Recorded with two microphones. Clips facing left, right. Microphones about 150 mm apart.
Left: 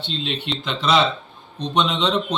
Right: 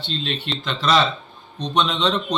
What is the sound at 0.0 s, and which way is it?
Speech, 15° left (ahead or behind).